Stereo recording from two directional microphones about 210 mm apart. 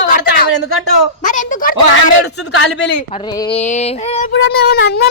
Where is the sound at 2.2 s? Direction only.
90° left.